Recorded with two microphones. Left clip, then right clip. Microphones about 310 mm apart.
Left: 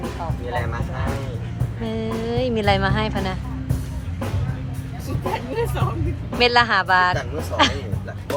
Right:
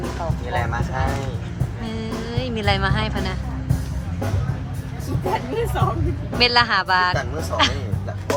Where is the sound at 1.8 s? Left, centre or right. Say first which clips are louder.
Left 4 dB; centre.